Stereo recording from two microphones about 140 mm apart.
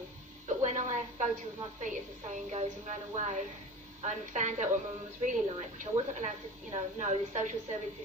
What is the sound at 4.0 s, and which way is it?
A woman's voice, 55° right (ahead or behind).